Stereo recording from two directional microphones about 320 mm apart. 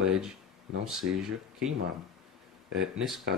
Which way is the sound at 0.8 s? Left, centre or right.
Centre.